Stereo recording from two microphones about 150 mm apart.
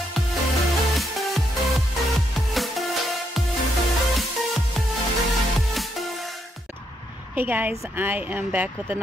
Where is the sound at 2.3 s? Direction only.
Centre (ahead or behind).